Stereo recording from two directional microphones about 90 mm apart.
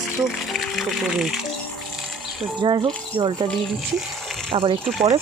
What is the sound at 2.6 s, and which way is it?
Speech, 60° right (ahead or behind).